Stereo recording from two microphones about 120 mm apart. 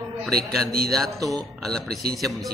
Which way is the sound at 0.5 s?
5° left (ahead or behind).